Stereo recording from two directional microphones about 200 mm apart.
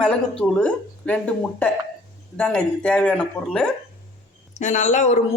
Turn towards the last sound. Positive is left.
turn(degrees=35)  # may be behind; listen again after turning